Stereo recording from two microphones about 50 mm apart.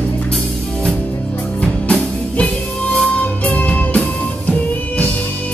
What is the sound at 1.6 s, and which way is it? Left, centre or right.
Music, left.